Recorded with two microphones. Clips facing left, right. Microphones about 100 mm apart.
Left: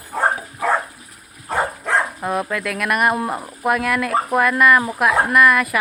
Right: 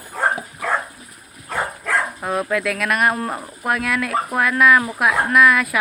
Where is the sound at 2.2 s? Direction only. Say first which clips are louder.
Right 1 dB; centre (ahead or behind).